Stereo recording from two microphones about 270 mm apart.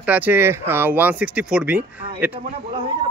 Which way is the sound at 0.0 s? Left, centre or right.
Centre.